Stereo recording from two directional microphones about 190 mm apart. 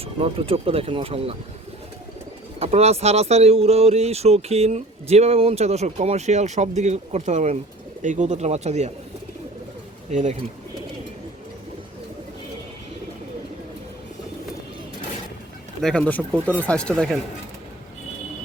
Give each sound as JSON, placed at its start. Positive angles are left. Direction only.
{"t": 0.0, "sound": "speech", "side_deg": -30}
{"t": 2.6, "sound": "speech", "side_deg": -35}
{"t": 10.1, "sound": "speech", "side_deg": -40}
{"t": 15.8, "sound": "speech", "side_deg": 5}